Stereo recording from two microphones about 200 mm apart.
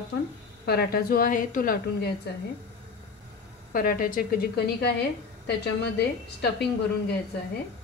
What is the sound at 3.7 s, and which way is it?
Speech, 45° left (ahead or behind).